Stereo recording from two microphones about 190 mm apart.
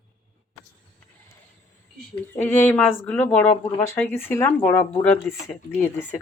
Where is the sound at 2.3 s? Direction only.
10° left (ahead or behind).